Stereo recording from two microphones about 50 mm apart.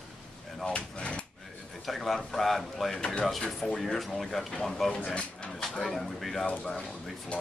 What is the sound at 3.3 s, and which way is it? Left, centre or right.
A man's voice, centre.